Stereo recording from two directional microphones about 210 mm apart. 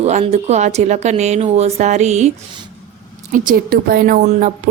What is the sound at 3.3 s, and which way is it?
Speech, 40° right (ahead or behind).